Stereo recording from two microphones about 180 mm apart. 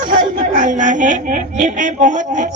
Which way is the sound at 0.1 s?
45° right (ahead or behind).